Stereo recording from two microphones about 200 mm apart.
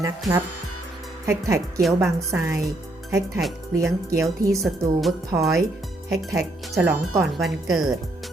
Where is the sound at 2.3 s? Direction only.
15° right (ahead or behind).